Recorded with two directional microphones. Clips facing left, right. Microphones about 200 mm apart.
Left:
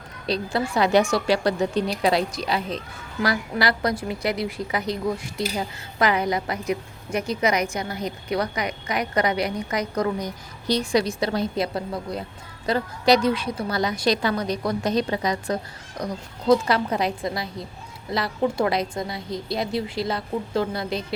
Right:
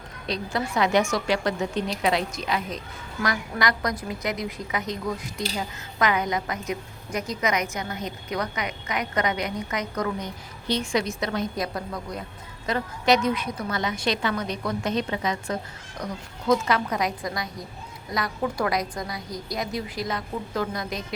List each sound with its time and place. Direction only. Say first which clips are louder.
0.3 s a woman's voice: left 4 dB; 30° left (ahead or behind)